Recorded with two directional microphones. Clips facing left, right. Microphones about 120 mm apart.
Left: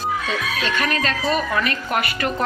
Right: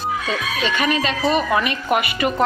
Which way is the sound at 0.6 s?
5° right (ahead or behind).